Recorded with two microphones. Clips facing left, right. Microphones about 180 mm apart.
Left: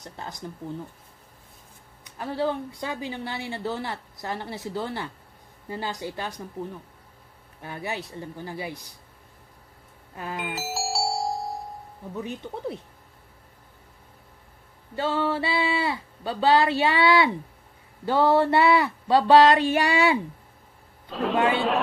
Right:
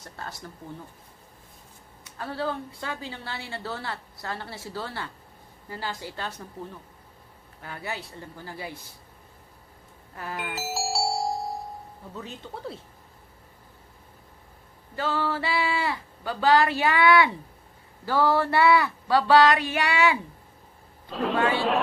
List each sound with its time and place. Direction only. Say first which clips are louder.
0.0 s a woman's voice: left 2 dB; 20° left (ahead or behind)
2.0 s a woman's voice: left 4 dB; 15° left (ahead or behind)
7.6 s speech: left 3 dB; 20° left (ahead or behind)
10.3 s music: even; centre (ahead or behind)
12.1 s a woman's voice: left 6 dB; 15° left (ahead or behind)
15.0 s speech: left 3 dB; 25° left (ahead or behind)
21.1 s a man's voice: left 2 dB; centre (ahead or behind)